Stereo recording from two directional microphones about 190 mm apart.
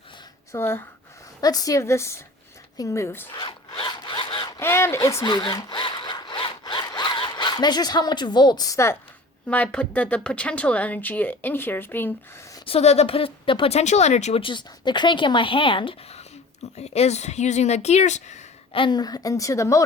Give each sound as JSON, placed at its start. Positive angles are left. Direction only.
{"t": 0.5, "sound": "speech", "side_deg": 10}
{"t": 3.3, "sound": "zipper", "side_deg": 25}
{"t": 9.5, "sound": "speech", "side_deg": 5}
{"t": 12.5, "sound": "a woman's voice", "side_deg": 30}